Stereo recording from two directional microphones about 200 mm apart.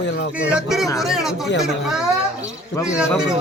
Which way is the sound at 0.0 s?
60° left (ahead or behind).